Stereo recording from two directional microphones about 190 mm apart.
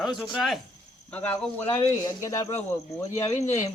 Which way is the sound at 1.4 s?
10° left (ahead or behind).